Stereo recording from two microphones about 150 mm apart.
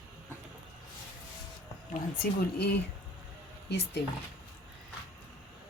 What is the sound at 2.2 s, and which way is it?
Speech, 90° left.